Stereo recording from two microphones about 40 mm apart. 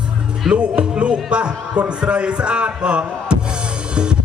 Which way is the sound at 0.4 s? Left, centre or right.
Centre.